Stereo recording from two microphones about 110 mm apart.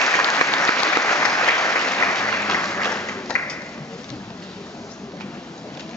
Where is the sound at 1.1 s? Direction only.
5° left (ahead or behind).